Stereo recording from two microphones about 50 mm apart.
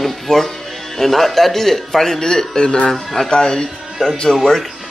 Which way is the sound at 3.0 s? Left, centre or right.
Centre.